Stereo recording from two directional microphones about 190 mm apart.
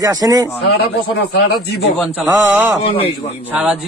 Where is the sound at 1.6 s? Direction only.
60° left (ahead or behind).